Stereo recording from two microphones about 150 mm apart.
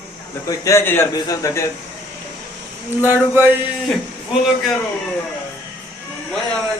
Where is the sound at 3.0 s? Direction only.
15° right (ahead or behind).